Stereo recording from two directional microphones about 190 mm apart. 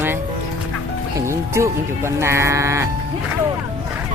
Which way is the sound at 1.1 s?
15° right (ahead or behind).